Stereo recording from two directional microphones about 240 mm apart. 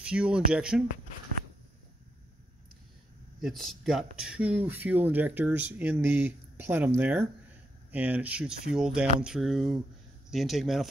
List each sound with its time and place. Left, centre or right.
0.0 s speech: centre
3.3 s speech: centre